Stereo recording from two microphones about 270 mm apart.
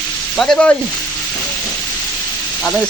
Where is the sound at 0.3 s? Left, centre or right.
Centre.